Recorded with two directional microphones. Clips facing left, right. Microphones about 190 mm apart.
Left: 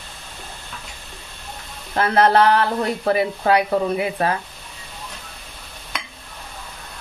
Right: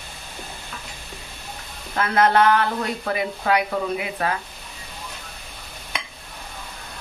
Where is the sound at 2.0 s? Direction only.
35° left (ahead or behind).